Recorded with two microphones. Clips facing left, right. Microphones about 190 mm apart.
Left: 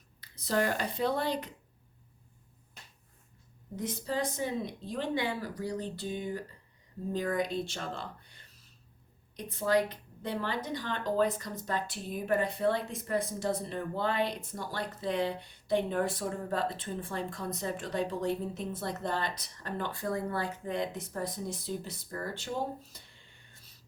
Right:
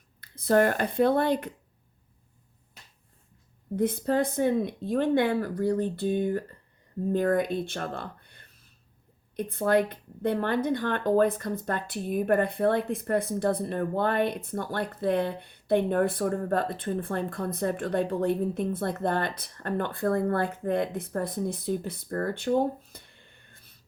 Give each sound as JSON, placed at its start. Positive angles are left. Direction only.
{"t": 0.2, "sound": "speech", "side_deg": -55}
{"t": 3.8, "sound": "speech", "side_deg": -55}